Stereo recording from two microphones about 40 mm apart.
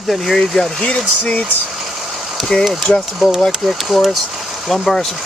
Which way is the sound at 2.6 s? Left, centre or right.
Centre.